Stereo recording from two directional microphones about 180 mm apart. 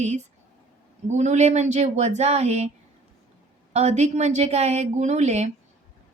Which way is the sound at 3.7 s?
40° right (ahead or behind).